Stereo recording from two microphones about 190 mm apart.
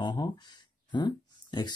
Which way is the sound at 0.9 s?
25° left (ahead or behind).